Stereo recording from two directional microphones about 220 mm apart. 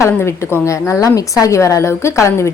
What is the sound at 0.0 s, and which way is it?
A woman's voice, 10° left (ahead or behind).